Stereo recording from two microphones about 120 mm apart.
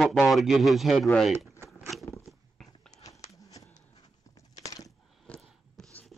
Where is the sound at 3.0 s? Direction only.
30° left (ahead or behind).